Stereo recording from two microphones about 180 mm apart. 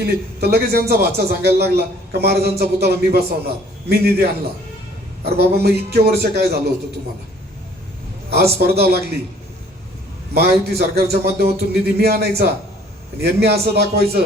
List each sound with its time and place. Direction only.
0.0 s a man's voice: 60° right (ahead or behind)
8.5 s a man's voice: 60° right (ahead or behind)
10.3 s a man's voice: 65° right (ahead or behind)